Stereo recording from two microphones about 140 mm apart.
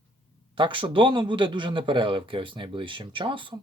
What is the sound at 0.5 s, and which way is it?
Speech, 35° right (ahead or behind).